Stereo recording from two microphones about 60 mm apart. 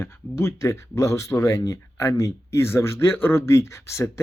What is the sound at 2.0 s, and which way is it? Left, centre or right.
Speech, left.